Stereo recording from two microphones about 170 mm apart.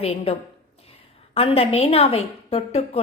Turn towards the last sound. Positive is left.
turn(degrees=35)  # may be behind; listen again after turning